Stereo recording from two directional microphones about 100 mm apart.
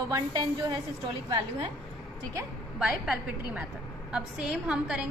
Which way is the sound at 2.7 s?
5° right (ahead or behind).